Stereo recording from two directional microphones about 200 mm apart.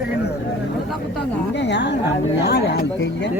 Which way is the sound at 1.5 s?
60° left (ahead or behind).